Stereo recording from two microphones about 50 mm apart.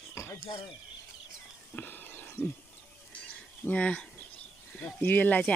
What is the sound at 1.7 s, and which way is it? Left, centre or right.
Whispering, left.